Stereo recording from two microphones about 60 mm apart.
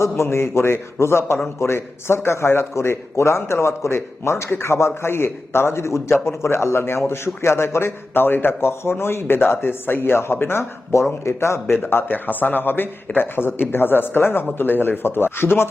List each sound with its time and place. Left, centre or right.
0.0 s a man's voice: left